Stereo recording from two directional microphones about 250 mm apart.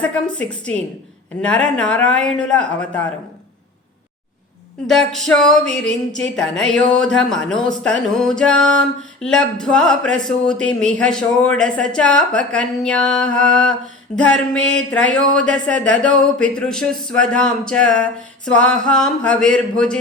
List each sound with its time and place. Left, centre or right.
0.3 s speech: centre
4.9 s speech: centre